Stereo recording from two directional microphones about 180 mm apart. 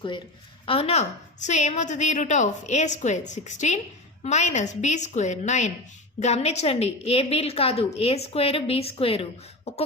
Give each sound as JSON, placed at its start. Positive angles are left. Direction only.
{"t": 0.6, "sound": "a woman's voice", "side_deg": 30}